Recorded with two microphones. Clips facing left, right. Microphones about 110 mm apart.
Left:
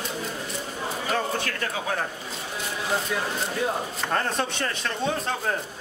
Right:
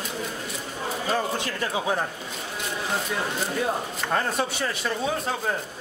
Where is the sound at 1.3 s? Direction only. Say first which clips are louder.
Right 1 dB; 20° right (ahead or behind).